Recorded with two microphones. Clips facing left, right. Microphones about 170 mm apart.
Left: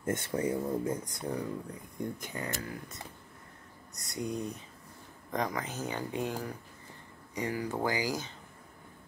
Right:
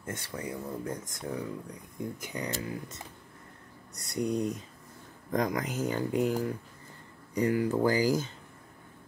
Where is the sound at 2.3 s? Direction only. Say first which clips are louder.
Right 3 dB; 20° right (ahead or behind).